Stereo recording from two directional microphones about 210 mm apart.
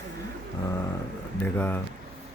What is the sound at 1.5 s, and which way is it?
Speech, 10° left (ahead or behind).